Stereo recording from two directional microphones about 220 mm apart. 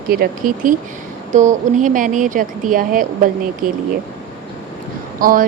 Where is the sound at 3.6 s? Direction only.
90° right.